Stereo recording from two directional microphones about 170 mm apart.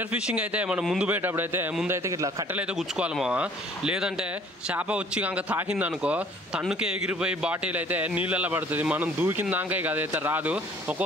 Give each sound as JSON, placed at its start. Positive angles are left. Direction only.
{"t": 0.1, "sound": "speech", "side_deg": -5}
{"t": 2.0, "sound": "a man's voice", "side_deg": -20}
{"t": 2.5, "sound": "speech", "side_deg": -5}